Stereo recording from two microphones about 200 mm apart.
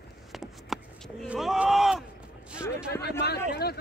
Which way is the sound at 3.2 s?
55° left (ahead or behind).